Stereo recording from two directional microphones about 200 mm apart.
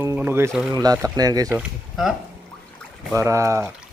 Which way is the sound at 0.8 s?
15° right (ahead or behind).